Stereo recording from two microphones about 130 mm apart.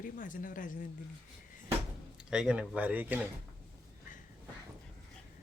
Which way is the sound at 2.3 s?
5° right (ahead or behind).